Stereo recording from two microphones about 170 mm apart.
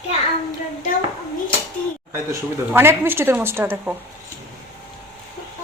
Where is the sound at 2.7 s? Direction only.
15° right (ahead or behind).